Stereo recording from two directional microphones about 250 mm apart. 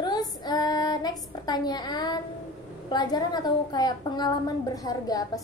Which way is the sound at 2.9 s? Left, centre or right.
Centre.